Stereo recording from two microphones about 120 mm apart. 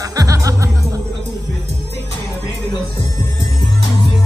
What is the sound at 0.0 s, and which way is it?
Music, 30° right (ahead or behind).